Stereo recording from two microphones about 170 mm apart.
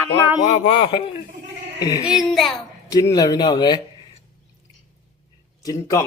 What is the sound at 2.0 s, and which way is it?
Speech, 5° right (ahead or behind).